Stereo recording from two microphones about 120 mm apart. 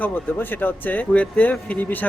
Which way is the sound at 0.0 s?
15° left (ahead or behind).